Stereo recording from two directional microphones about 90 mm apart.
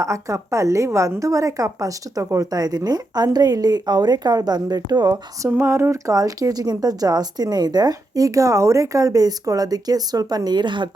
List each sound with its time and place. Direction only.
0.0 s a woman's voice: 35° right (ahead or behind)
5.5 s speech: 30° right (ahead or behind); by 10.8 s 60° right (ahead or behind)